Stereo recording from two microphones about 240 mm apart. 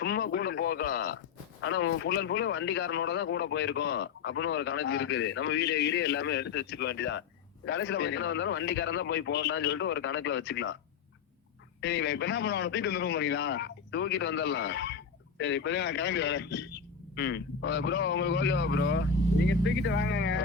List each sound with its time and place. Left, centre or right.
0.0 s speech: left
1.6 s a man's voice: left
11.8 s a man's voice: left